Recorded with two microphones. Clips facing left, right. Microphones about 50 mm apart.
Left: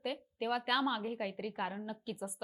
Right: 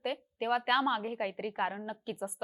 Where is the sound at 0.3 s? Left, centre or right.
Right.